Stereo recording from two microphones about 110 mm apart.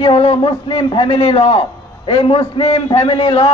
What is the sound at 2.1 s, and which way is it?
A man's voice, 50° left (ahead or behind).